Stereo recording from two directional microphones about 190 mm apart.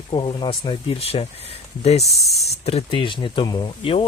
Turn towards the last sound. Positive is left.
turn(degrees=30)  # may be behind; listen again after turning